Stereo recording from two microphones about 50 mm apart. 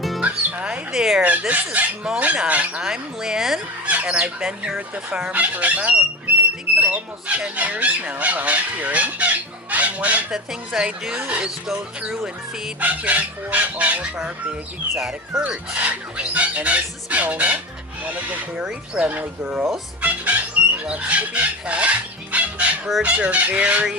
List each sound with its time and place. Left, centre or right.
0.2 s music: right
0.9 s a woman's voice: centre
1.2 s speech: right
2.8 s a woman's voice: centre
3.8 s fowl: right
4.1 s a woman's voice: centre
10.3 s a woman's voice: centre
12.8 s speech: right
14.9 s a woman's voice: centre
15.4 s speech: right
20.0 s chicken: right
23.0 s speech: right